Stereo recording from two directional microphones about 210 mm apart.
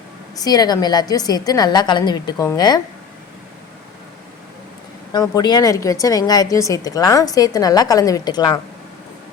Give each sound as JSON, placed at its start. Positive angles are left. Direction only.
{"t": 0.3, "sound": "a woman's voice", "side_deg": 20}
{"t": 5.1, "sound": "a woman's voice", "side_deg": 20}